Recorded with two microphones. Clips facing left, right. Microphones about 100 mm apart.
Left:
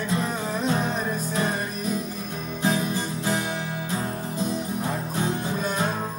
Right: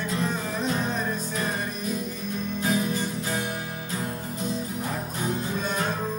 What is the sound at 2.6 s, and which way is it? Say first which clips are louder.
Music: left 2 dB; 25° left (ahead or behind).